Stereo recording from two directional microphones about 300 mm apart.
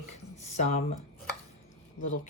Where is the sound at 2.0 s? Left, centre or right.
Left.